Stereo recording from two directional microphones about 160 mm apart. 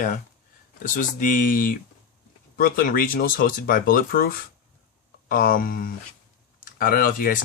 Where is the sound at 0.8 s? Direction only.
55° left (ahead or behind).